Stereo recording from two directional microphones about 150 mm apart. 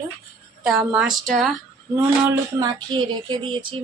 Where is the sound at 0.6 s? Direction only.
5° right (ahead or behind).